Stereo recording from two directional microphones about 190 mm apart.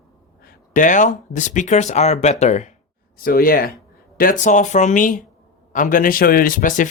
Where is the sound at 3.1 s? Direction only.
50° left (ahead or behind).